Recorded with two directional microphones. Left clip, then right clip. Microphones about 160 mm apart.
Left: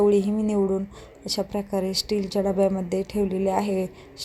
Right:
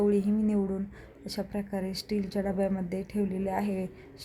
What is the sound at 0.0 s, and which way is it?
A woman's voice, 20° left (ahead or behind).